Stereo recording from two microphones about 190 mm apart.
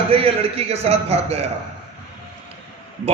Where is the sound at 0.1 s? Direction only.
30° right (ahead or behind).